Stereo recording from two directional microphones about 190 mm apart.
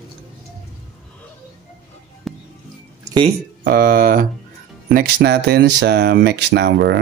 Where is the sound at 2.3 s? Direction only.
Centre (ahead or behind).